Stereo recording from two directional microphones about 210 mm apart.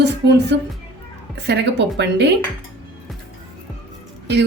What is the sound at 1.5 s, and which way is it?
Speech, 55° right (ahead or behind).